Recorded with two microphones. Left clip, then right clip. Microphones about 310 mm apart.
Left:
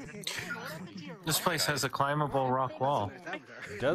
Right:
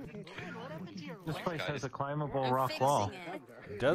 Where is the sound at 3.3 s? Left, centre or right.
Left.